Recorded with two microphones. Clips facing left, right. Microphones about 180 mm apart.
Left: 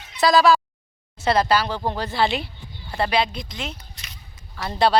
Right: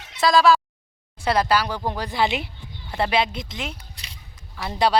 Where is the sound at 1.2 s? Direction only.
10° right (ahead or behind).